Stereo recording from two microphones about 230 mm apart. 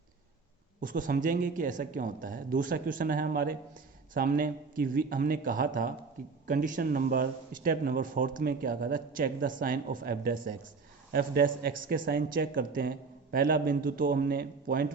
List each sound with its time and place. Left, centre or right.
0.8 s speech: right